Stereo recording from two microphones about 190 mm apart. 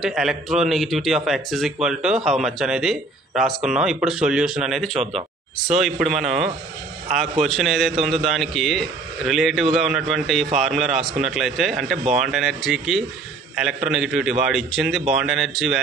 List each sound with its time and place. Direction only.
0.0 s a man's voice: centre (ahead or behind)